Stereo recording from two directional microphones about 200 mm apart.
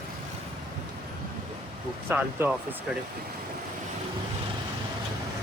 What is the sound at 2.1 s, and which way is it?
Speech, 10° right (ahead or behind).